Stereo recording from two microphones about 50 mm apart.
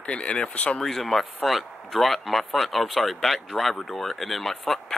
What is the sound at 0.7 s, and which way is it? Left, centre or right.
Speech, centre.